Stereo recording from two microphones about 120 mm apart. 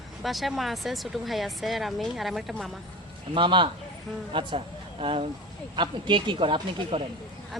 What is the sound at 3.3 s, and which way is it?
Speech, 40° right (ahead or behind).